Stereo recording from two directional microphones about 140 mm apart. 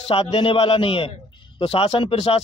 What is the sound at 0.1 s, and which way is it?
Speech, 45° left (ahead or behind).